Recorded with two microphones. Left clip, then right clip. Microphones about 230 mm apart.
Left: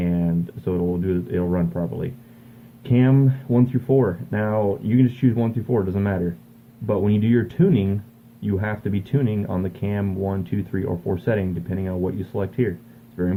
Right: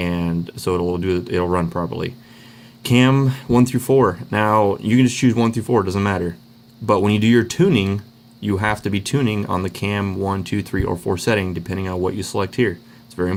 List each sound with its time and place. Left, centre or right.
0.0 s speech: right